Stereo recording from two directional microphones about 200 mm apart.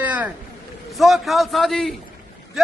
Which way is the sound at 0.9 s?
Centre (ahead or behind).